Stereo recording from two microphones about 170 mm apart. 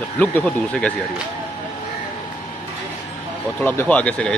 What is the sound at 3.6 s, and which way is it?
Speech, 10° left (ahead or behind).